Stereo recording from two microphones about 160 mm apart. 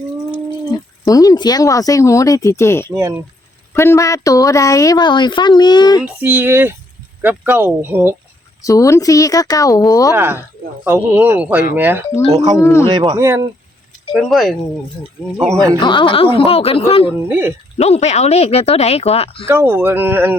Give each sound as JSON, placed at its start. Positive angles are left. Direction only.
{"t": 0.7, "sound": "a woman's voice", "side_deg": 25}
{"t": 3.0, "sound": "speech", "side_deg": -15}
{"t": 3.8, "sound": "a woman's voice", "side_deg": 20}
{"t": 6.1, "sound": "speech", "side_deg": -10}
{"t": 8.6, "sound": "a woman's voice", "side_deg": 20}
{"t": 10.8, "sound": "speech", "side_deg": -15}
{"t": 12.3, "sound": "speech", "side_deg": -25}
{"t": 14.1, "sound": "speech", "side_deg": 0}
{"t": 15.8, "sound": "speech", "side_deg": 30}
{"t": 17.2, "sound": "speech", "side_deg": -10}
{"t": 17.7, "sound": "speech", "side_deg": 40}
{"t": 19.5, "sound": "speech", "side_deg": -15}